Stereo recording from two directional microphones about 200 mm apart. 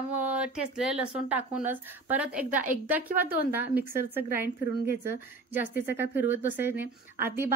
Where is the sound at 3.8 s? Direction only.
50° right (ahead or behind).